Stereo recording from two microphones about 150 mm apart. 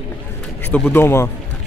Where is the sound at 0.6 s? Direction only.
10° left (ahead or behind).